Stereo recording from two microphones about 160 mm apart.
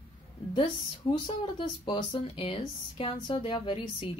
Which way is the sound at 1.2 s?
30° left (ahead or behind).